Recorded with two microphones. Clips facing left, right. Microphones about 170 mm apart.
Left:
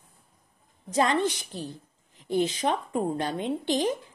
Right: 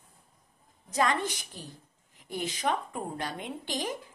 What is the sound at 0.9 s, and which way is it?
Speech, 25° left (ahead or behind).